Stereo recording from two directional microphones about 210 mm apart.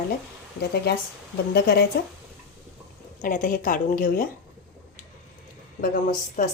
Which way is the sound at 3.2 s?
40° left (ahead or behind).